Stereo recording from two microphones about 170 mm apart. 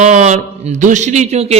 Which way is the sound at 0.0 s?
45° right (ahead or behind).